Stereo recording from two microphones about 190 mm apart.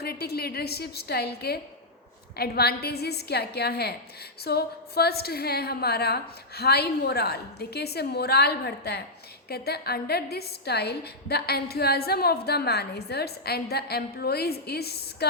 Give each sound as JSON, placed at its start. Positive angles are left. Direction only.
{"t": 0.0, "sound": "a woman's voice", "side_deg": 55}